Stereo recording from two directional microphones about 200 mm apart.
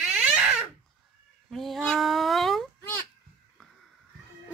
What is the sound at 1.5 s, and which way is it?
Cat, centre (ahead or behind).